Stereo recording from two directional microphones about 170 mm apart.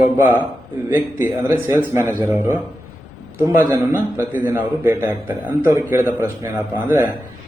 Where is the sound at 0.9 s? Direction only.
15° right (ahead or behind).